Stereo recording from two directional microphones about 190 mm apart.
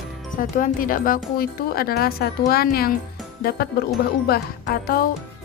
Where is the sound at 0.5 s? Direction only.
45° left (ahead or behind).